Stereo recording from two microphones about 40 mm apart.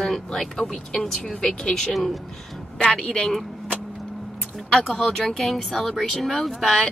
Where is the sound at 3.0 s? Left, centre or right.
Centre.